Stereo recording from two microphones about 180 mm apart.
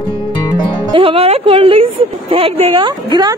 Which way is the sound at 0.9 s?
30° right (ahead or behind).